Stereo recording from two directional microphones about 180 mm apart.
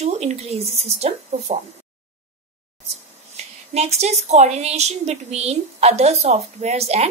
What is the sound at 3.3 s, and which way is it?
A woman's voice, 35° right (ahead or behind).